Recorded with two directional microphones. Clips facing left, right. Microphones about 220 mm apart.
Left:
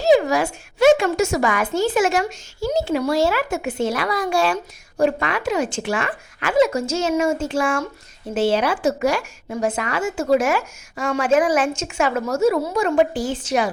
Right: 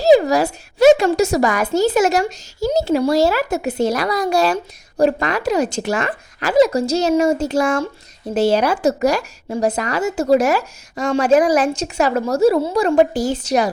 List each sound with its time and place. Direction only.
0.0 s a woman's voice: 35° right (ahead or behind)